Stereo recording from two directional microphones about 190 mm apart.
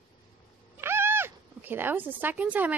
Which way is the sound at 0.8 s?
10° right (ahead or behind).